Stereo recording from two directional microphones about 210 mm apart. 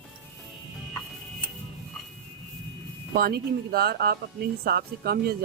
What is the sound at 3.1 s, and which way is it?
Speech, 45° right (ahead or behind).